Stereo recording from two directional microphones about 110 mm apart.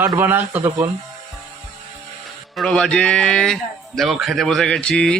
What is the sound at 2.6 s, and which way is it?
A man's voice, 5° left (ahead or behind).